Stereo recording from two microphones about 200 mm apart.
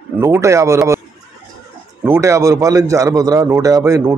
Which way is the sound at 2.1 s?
15° right (ahead or behind).